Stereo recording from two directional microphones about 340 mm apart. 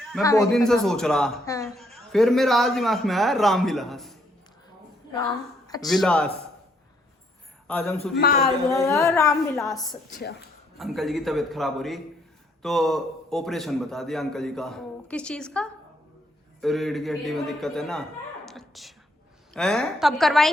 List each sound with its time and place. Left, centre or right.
0.1 s a man's voice: centre
5.8 s a man's voice: centre
7.7 s a man's voice: centre
8.2 s speech: left
8.7 s a sound: centre
10.1 s speech: left
10.8 s a man's voice: centre
18.4 s a sound: centre
19.5 s a man's voice: centre